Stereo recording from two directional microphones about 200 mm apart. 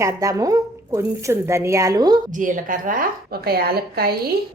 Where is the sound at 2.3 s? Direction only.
40° right (ahead or behind).